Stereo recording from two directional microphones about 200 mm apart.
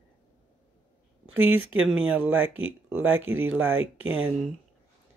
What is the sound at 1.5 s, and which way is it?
Speech, 90° right.